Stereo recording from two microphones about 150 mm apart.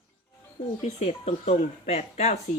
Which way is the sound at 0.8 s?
45° left (ahead or behind).